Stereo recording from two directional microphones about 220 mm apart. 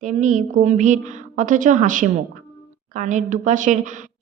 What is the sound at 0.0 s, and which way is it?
Speech, 35° right (ahead or behind).